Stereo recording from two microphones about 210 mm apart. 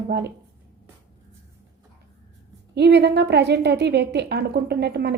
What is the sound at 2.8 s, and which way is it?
A woman's voice, 50° right (ahead or behind).